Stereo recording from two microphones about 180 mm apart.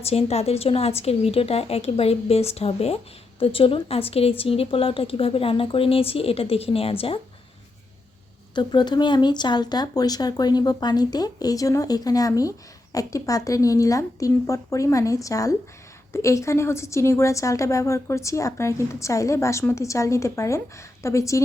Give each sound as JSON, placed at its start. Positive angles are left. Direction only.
{"t": 0.0, "sound": "a woman's voice", "side_deg": 35}
{"t": 8.5, "sound": "a woman's voice", "side_deg": 25}